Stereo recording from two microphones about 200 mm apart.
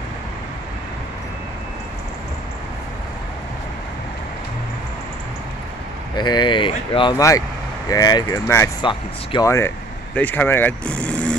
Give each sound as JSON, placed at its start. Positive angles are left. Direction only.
{"t": 6.1, "sound": "speech", "side_deg": 20}